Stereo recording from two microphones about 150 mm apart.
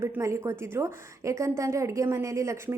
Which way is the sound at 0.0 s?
15° right (ahead or behind).